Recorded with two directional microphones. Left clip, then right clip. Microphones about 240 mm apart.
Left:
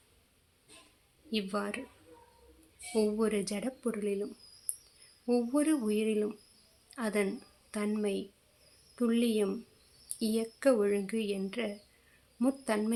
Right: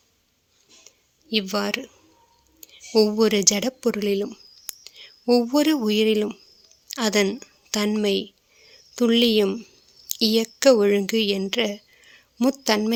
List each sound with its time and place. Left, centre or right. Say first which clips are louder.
1.3 s speech: right 11 dB; right
2.9 s a woman's voice: right 12 dB; right